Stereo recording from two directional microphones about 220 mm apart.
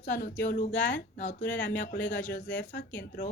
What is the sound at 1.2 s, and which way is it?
Speech, 35° left (ahead or behind).